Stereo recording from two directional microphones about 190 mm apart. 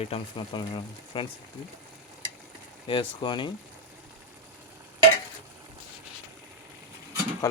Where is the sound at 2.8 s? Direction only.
30° left (ahead or behind).